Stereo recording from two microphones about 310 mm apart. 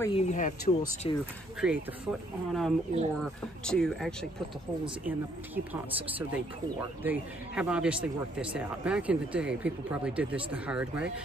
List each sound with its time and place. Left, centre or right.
0.0 s speech: centre
1.6 s speech: centre
5.7 s speech: centre